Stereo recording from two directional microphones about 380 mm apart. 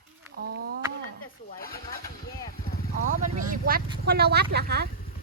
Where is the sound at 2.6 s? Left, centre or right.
Left.